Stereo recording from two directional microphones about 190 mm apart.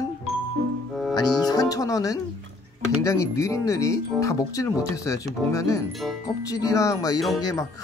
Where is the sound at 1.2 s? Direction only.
20° left (ahead or behind).